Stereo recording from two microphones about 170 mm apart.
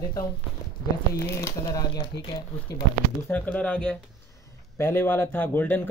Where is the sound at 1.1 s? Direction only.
15° left (ahead or behind).